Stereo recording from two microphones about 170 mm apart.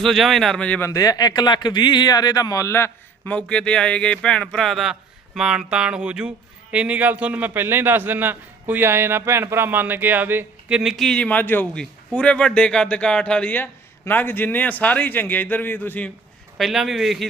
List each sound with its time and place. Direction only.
0.0 s speech: centre (ahead or behind)
0.9 s speech: 20° left (ahead or behind)
16.6 s speech: centre (ahead or behind)